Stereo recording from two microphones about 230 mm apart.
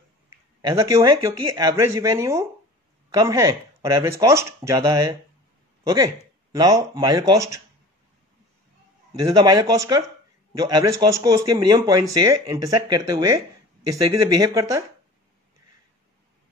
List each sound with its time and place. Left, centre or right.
0.6 s speech: centre
6.5 s speech: centre
9.2 s speech: centre